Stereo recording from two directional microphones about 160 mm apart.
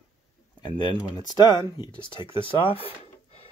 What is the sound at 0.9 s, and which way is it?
Speech, 25° left (ahead or behind).